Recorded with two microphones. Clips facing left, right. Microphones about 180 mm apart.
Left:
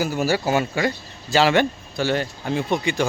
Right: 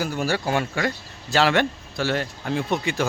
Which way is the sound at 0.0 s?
5° left (ahead or behind).